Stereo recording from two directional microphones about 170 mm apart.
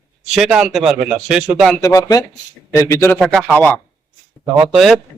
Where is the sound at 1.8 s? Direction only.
20° left (ahead or behind).